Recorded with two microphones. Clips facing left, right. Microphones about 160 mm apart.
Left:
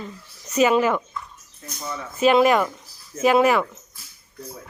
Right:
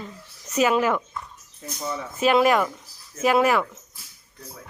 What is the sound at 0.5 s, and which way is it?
Speech, 5° right (ahead or behind).